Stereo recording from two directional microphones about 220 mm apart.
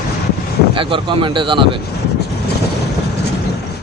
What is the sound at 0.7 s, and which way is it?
Speech, 25° right (ahead or behind).